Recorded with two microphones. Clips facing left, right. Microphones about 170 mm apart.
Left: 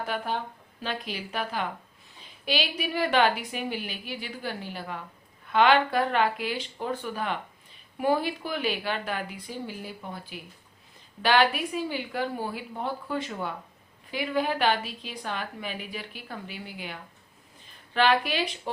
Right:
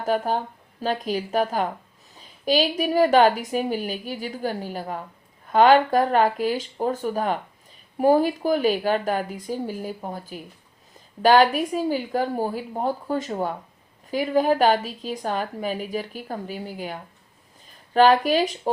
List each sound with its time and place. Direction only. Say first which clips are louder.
0.0 s a woman's voice: right 7 dB; 40° right (ahead or behind)